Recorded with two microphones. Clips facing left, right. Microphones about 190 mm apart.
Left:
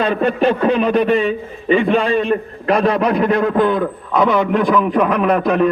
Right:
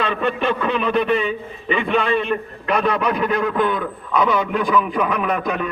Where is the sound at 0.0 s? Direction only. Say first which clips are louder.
Left 6 dB; 40° left (ahead or behind).